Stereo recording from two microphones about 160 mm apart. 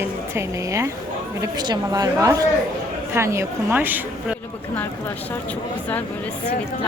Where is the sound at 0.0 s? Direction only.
15° right (ahead or behind).